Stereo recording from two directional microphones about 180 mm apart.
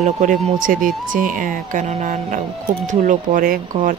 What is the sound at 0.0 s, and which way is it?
Speech, 45° right (ahead or behind).